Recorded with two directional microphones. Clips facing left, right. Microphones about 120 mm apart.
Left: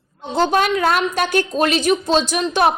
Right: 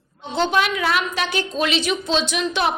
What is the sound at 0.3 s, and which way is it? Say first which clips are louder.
A woman's voice: left 3 dB; 40° left (ahead or behind).